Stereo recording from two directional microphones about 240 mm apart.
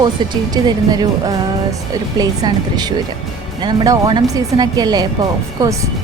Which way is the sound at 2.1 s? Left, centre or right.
Centre.